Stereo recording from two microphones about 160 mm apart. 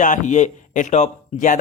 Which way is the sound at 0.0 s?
50° left (ahead or behind).